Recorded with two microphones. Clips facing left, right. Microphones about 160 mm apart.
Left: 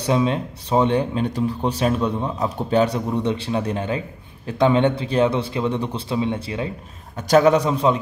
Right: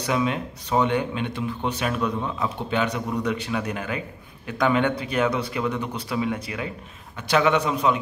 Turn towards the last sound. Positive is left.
turn(degrees=30)  # may be behind; listen again after turning